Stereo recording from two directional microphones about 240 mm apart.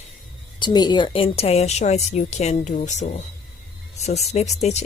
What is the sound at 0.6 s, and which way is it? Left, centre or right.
Speech, centre.